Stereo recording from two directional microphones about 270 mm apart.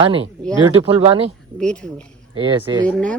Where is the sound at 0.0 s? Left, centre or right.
Centre.